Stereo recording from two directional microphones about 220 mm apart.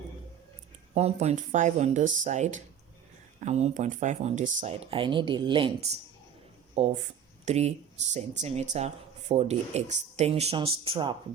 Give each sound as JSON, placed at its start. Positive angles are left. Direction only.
{"t": 0.9, "sound": "speech", "side_deg": -30}